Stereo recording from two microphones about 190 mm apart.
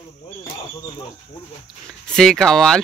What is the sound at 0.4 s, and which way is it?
Speech, 20° left (ahead or behind).